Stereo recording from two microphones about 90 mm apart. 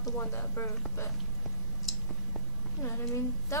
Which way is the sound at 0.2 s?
30° left (ahead or behind).